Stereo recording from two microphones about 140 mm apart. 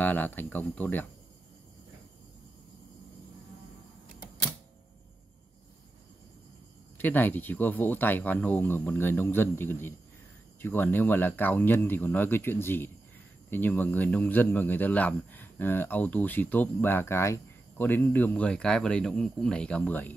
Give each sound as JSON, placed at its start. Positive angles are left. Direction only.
{"t": 0.0, "sound": "speech", "side_deg": 10}
{"t": 7.0, "sound": "speech", "side_deg": 15}